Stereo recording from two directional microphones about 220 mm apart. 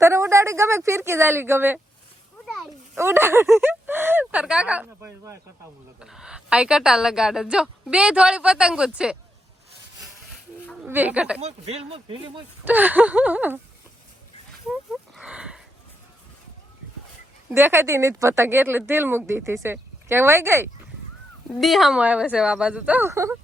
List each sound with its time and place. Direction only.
0.0 s speech: 10° right (ahead or behind)
2.5 s a sound: centre (ahead or behind)
3.0 s speech: 10° right (ahead or behind)
6.0 s speech: centre (ahead or behind)
10.8 s speech: 10° right (ahead or behind)
11.3 s a man's voice: 30° right (ahead or behind)
12.6 s speech: 5° right (ahead or behind)
14.7 s horse: centre (ahead or behind)
17.5 s speech: 10° right (ahead or behind)
21.6 s speech: centre (ahead or behind)